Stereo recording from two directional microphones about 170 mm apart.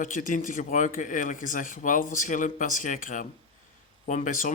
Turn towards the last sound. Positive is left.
turn(degrees=50)  # may be behind; listen again after turning